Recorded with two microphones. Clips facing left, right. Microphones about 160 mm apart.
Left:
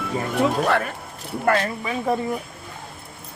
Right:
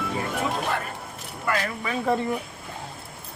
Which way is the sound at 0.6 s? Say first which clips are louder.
Left 7 dB; 90° left.